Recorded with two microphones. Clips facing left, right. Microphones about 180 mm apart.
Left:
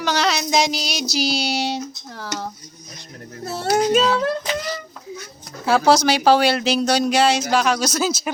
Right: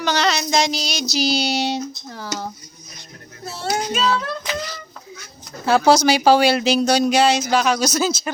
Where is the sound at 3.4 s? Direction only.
50° left (ahead or behind).